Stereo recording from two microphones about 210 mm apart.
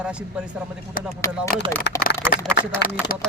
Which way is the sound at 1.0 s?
40° left (ahead or behind).